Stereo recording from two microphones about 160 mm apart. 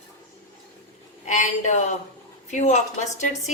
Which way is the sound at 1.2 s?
50° left (ahead or behind).